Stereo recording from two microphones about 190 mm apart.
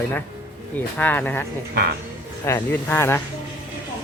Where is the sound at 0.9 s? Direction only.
10° left (ahead or behind).